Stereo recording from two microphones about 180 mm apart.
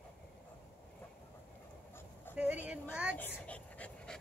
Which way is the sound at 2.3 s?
10° left (ahead or behind).